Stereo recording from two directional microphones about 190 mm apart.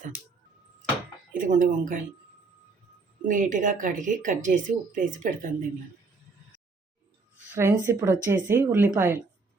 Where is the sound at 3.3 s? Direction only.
45° right (ahead or behind).